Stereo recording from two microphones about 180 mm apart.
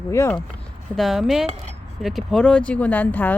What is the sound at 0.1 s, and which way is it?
Speech, 15° left (ahead or behind).